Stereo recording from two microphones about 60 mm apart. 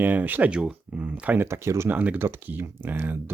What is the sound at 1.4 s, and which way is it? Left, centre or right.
Speech, right.